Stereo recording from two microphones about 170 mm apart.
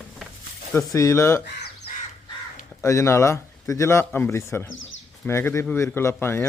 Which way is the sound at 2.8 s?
15° left (ahead or behind).